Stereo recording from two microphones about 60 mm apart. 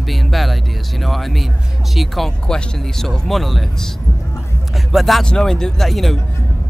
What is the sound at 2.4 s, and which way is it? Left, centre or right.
Speech, centre.